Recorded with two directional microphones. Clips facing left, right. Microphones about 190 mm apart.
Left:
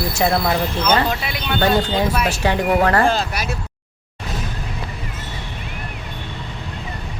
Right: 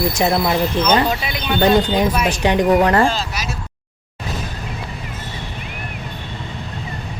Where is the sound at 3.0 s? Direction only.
55° left (ahead or behind).